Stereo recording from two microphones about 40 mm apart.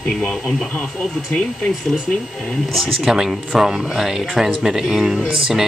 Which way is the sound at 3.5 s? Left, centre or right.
Centre.